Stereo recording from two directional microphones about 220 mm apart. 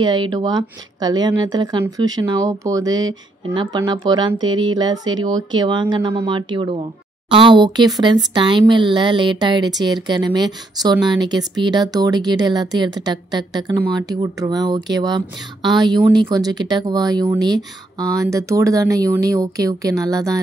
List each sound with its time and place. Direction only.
0.0 s speech: 20° right (ahead or behind)